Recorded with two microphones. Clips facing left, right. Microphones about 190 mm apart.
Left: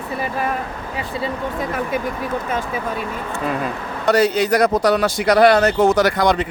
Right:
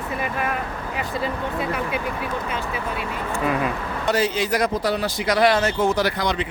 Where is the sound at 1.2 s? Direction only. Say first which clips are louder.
Left 3 dB; 40° left (ahead or behind).